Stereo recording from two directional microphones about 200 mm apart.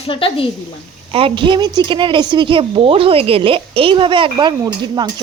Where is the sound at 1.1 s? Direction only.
25° right (ahead or behind).